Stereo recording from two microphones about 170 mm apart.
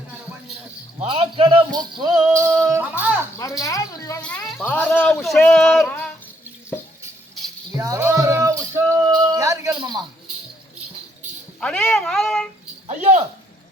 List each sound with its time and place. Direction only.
1.0 s a sound: 35° right (ahead or behind); by 3.2 s 10° right (ahead or behind)
3.3 s speech: 20° left (ahead or behind)
4.2 s speech: 10° left (ahead or behind)
7.8 s music: 15° right (ahead or behind)
11.6 s speech: 5° left (ahead or behind)
12.9 s a sound: 40° right (ahead or behind)